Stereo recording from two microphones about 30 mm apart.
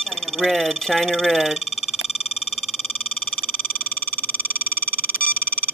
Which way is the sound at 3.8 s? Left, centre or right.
Left.